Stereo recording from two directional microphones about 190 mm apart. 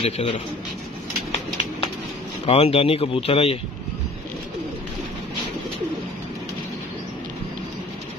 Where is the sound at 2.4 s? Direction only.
30° left (ahead or behind).